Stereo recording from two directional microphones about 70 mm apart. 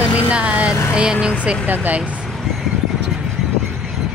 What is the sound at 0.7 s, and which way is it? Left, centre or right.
Vehicle, left.